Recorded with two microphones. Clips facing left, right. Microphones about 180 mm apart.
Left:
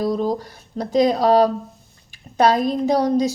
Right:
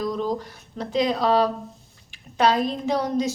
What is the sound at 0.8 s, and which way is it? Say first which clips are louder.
Speech: left 6 dB; 40° left (ahead or behind).